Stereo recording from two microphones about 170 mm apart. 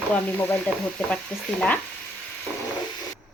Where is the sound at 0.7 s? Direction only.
10° left (ahead or behind).